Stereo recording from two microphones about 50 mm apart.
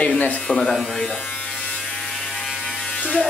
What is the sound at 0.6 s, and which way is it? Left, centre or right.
Speech, centre.